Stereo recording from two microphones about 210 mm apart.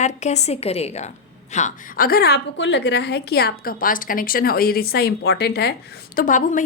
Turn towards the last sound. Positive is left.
turn(degrees=40)  # may be behind; listen again after turning